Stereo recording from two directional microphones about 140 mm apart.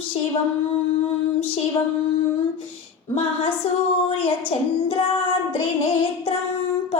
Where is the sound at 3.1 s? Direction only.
40° left (ahead or behind).